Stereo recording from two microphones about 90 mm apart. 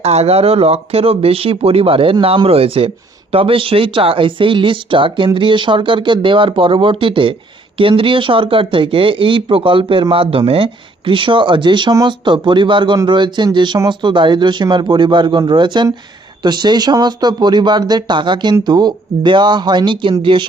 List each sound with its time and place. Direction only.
0.4 s a man's voice: 90° right; by 20.5 s 65° right (ahead or behind)